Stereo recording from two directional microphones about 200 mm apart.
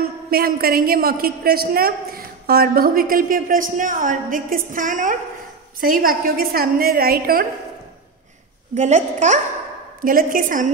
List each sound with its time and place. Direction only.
0.3 s a woman's voice: 50° right (ahead or behind)
8.7 s a woman's voice: 35° right (ahead or behind)